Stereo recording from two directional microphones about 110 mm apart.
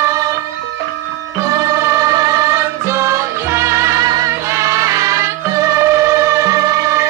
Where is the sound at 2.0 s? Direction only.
30° right (ahead or behind).